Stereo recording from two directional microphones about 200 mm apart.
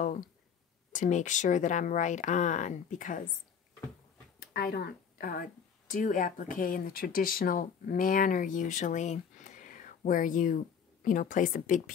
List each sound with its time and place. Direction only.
0.9 s speech: 40° left (ahead or behind)
4.4 s a sound: 50° left (ahead or behind)
5.9 s speech: 40° left (ahead or behind)